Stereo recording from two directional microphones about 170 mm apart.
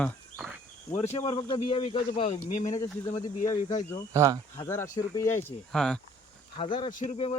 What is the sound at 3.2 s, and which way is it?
Speech, 25° left (ahead or behind).